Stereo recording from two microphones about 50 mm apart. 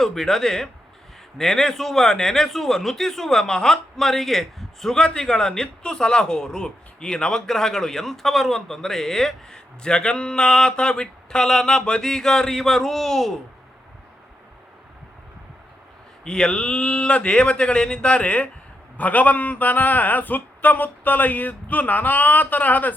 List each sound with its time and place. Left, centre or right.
0.0 s a man's voice: centre
16.2 s a man's voice: centre; by 23.0 s left